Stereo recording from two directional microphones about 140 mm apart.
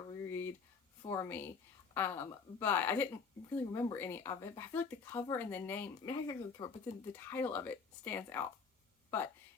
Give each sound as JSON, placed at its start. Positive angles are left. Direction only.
{"t": 0.1, "sound": "a sound", "side_deg": 15}
{"t": 1.0, "sound": "speech", "side_deg": 20}
{"t": 6.0, "sound": "speech", "side_deg": 25}
{"t": 7.2, "sound": "speech", "side_deg": 15}